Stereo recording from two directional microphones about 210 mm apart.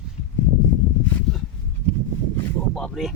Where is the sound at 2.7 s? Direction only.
Centre (ahead or behind).